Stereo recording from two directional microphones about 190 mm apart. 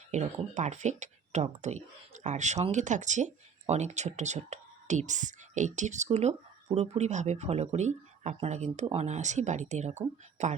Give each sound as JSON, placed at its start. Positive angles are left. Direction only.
{"t": 0.1, "sound": "speech", "side_deg": -35}